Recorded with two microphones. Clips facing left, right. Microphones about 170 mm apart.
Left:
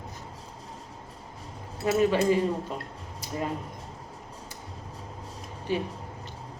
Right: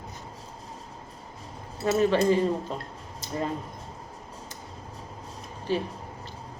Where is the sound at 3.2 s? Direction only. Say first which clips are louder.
Right 1 dB; 10° left (ahead or behind).